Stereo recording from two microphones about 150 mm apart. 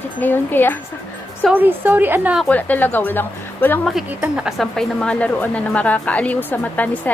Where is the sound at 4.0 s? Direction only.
5° right (ahead or behind).